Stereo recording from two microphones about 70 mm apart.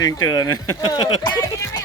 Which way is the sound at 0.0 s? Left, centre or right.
Left.